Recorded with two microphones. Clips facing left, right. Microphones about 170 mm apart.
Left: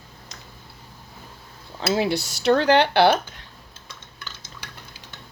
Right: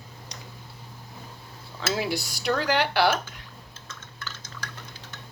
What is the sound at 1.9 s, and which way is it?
Speech, 25° left (ahead or behind).